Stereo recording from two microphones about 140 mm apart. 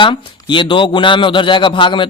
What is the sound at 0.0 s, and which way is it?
A man's voice, 35° left (ahead or behind).